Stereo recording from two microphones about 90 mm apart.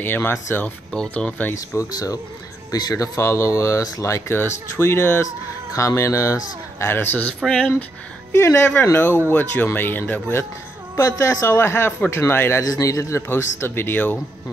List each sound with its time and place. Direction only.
0.0 s speech: 25° left (ahead or behind)
0.9 s speech: 10° left (ahead or behind)
1.5 s speech: 40° left (ahead or behind)
8.3 s speech: 30° left (ahead or behind)
11.0 s speech: 35° left (ahead or behind)
13.3 s speech: 25° left (ahead or behind)